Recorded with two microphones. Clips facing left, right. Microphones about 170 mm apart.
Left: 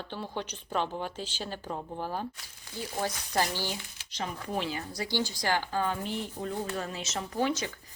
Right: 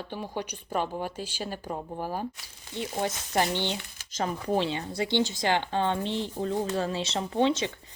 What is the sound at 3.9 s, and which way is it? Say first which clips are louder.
Speech: right 6 dB; 45° right (ahead or behind).